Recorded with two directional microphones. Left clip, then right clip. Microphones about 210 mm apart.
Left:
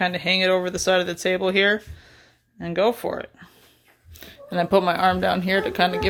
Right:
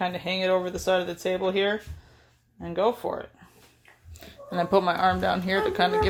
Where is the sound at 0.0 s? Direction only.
30° left (ahead or behind).